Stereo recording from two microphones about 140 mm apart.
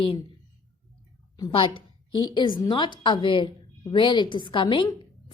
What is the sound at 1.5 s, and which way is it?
A woman's voice, 35° left (ahead or behind).